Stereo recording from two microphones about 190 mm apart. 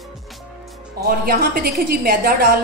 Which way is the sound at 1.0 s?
55° right (ahead or behind).